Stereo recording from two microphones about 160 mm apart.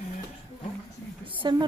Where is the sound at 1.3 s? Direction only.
30° right (ahead or behind).